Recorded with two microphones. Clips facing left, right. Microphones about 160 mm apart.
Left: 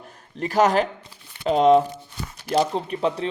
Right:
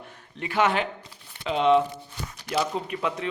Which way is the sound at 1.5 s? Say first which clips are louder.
Left 5 dB; 40° left (ahead or behind).